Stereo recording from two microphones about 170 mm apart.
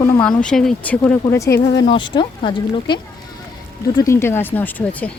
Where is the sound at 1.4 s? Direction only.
75° left (ahead or behind).